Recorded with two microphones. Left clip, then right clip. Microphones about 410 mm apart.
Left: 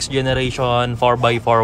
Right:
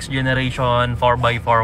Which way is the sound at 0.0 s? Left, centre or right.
Centre.